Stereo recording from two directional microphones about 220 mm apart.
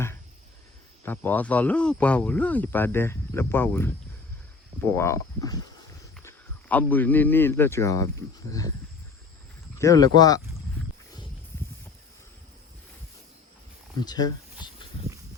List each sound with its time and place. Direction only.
1.0 s speech: 10° left (ahead or behind)
9.7 s speech: 15° left (ahead or behind)
14.0 s speech: 20° left (ahead or behind)